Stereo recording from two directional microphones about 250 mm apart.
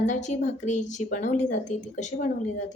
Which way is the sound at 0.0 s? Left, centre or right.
Left.